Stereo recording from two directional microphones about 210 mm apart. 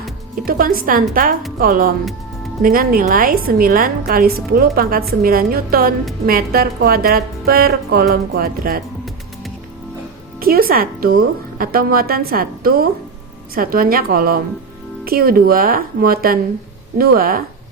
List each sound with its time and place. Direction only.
0.4 s a woman's voice: 45° right (ahead or behind)
10.4 s a woman's voice: 45° right (ahead or behind)